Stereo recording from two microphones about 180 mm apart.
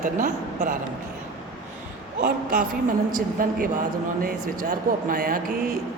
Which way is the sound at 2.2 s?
50° right (ahead or behind).